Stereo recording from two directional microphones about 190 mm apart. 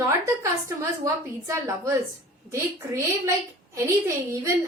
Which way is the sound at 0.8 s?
15° right (ahead or behind).